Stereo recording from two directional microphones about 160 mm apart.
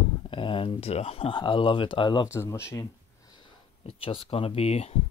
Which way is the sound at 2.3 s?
15° left (ahead or behind).